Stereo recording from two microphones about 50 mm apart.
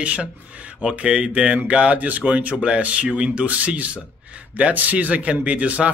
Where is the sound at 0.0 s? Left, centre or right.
Right.